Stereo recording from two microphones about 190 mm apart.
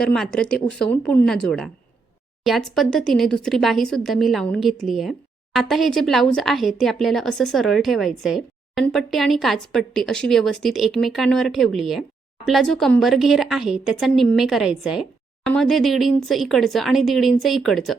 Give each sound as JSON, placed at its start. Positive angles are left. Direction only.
{"t": 0.0, "sound": "speech", "side_deg": 5}